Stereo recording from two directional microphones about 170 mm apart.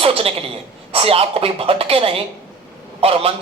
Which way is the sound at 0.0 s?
35° right (ahead or behind).